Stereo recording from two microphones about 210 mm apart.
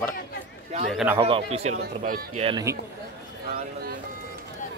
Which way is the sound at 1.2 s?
25° right (ahead or behind).